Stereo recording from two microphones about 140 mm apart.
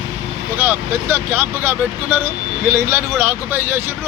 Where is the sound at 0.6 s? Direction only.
15° right (ahead or behind).